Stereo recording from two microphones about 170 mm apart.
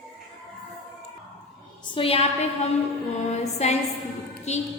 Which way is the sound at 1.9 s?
35° left (ahead or behind).